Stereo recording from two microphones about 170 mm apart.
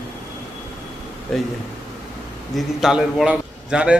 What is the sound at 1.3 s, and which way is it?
Speech, centre (ahead or behind).